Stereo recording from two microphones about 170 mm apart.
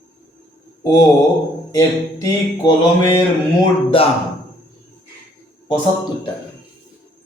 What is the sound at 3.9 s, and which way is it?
Speech, 30° left (ahead or behind).